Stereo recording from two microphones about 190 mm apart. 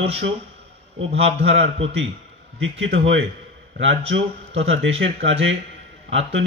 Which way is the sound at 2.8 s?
75° right (ahead or behind).